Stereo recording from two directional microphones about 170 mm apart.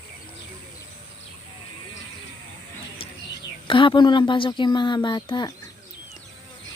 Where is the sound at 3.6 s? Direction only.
30° left (ahead or behind).